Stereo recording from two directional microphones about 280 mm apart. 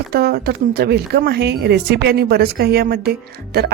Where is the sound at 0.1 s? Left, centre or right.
Right.